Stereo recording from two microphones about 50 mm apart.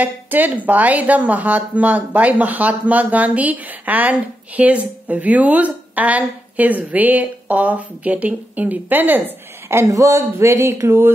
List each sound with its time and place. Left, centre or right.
0.0 s a woman's voice: right
9.7 s speech: right